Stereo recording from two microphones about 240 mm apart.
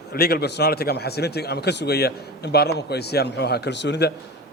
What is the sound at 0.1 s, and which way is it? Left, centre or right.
A man's voice, left.